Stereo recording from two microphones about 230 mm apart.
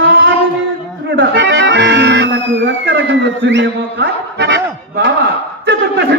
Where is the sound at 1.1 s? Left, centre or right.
Right.